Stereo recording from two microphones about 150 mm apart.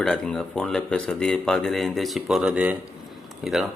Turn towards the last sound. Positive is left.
turn(degrees=0)  # may be behind; listen again after turning